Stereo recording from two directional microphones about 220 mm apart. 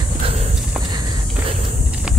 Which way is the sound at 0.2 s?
30° right (ahead or behind).